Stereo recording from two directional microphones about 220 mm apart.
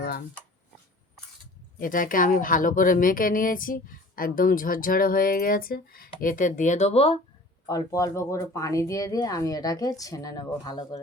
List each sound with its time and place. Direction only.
0.0 s a sound: 45° left (ahead or behind)
1.8 s speech: 40° left (ahead or behind)
7.7 s speech: 15° left (ahead or behind)